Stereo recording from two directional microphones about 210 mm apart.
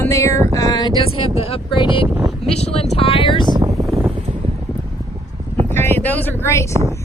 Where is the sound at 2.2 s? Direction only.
Centre (ahead or behind).